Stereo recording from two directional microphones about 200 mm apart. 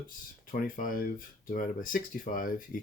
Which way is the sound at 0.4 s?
45° left (ahead or behind).